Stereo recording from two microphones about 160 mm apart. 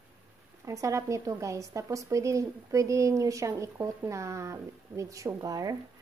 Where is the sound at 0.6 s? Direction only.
20° right (ahead or behind).